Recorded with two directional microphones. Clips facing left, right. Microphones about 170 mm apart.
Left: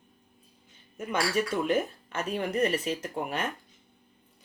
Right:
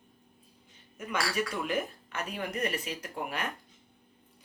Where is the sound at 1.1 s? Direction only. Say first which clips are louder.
Left 4 dB; 30° left (ahead or behind).